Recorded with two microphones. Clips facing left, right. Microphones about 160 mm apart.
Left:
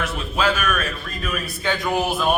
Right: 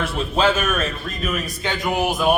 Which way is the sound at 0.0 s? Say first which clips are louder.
Right 3 dB; 25° right (ahead or behind).